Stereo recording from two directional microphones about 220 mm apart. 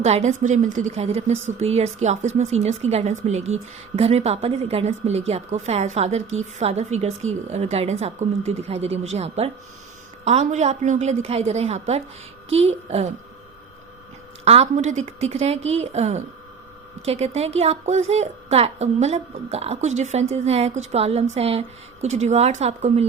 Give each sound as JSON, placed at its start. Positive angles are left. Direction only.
{"t": 0.0, "sound": "a woman's voice", "side_deg": -30}
{"t": 14.4, "sound": "a woman's voice", "side_deg": -30}